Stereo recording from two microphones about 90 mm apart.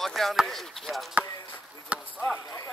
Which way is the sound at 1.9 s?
15° right (ahead or behind).